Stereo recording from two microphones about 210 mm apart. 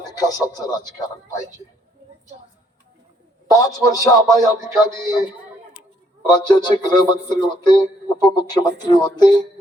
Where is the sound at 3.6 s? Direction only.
15° left (ahead or behind).